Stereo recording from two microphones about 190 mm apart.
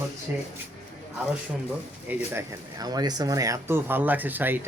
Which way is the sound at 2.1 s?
15° right (ahead or behind).